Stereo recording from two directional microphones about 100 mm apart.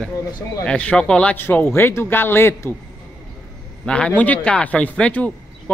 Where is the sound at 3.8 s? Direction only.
10° left (ahead or behind).